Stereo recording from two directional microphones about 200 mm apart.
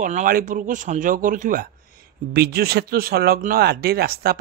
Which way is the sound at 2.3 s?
55° right (ahead or behind).